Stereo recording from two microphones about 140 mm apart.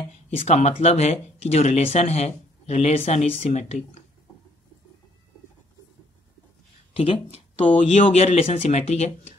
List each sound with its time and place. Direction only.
0.5 s speech: 55° left (ahead or behind)
6.9 s speech: 45° left (ahead or behind)